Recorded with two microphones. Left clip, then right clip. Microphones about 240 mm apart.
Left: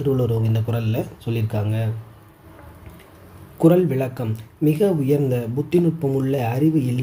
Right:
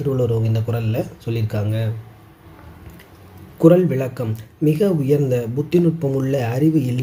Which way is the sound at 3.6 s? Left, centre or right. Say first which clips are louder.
Right 3 dB; centre.